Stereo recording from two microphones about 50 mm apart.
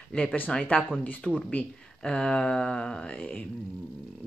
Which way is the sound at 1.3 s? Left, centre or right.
Centre.